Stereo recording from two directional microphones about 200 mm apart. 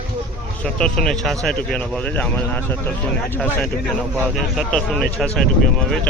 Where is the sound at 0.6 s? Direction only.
5° left (ahead or behind).